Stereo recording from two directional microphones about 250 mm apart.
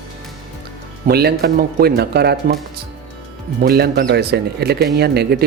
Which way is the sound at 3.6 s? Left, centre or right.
Right.